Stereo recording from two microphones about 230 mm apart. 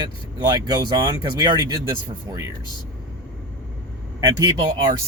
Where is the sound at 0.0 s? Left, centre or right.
Centre.